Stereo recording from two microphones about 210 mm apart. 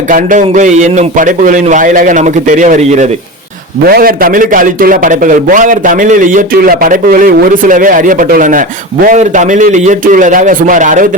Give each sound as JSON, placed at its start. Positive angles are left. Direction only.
{"t": 0.1, "sound": "a man's voice", "side_deg": -40}